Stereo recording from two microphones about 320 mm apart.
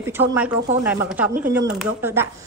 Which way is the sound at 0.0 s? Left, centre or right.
Centre.